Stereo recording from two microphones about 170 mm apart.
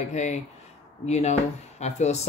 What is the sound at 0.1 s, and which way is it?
Speech, 45° left (ahead or behind).